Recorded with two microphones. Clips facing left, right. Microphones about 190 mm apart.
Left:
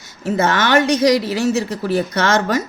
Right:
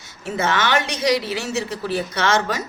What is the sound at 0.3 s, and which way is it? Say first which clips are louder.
Speech: left 5 dB; 40° left (ahead or behind).